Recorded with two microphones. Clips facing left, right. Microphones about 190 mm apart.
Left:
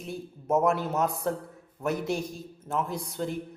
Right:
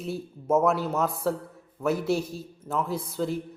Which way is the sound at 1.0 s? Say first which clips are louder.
Right 1 dB; centre (ahead or behind).